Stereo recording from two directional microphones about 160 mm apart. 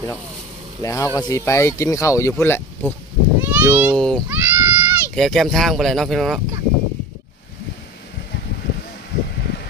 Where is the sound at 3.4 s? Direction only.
10° right (ahead or behind).